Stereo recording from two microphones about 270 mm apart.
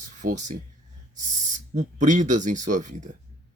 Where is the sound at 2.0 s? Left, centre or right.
Right.